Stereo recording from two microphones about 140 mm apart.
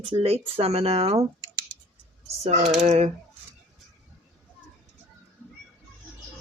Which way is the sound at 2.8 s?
55° right (ahead or behind).